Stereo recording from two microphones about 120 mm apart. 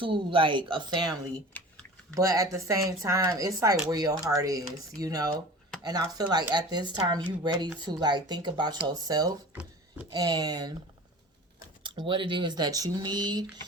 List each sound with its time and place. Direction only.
0.0 s speech: 45° right (ahead or behind)
1.5 s typing: 10° left (ahead or behind)
2.1 s speech: 30° right (ahead or behind)
11.8 s speech: 40° right (ahead or behind)